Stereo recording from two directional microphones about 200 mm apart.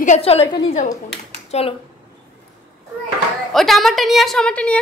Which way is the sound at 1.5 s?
30° left (ahead or behind).